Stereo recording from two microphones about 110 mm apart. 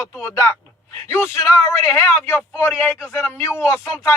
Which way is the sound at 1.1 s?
25° left (ahead or behind).